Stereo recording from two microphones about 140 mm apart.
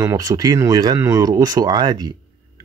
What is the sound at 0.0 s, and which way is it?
Speech, 25° right (ahead or behind).